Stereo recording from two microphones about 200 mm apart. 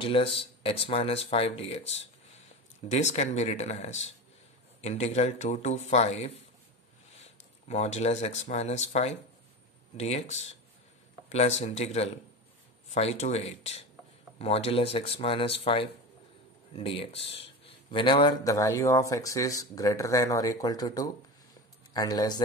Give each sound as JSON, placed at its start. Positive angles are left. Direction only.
{"t": 0.0, "sound": "a man's voice", "side_deg": 25}